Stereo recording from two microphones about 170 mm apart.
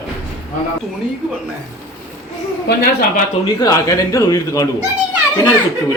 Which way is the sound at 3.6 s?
20° left (ahead or behind).